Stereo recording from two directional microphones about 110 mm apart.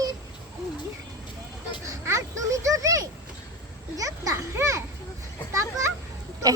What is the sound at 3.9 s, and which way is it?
Children playing, 30° right (ahead or behind).